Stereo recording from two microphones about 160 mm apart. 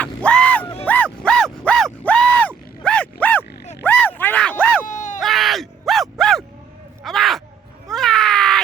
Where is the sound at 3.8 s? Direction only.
10° left (ahead or behind).